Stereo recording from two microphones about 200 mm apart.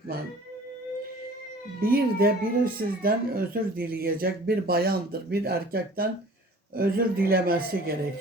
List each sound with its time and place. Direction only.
1.8 s speech: 50° right (ahead or behind)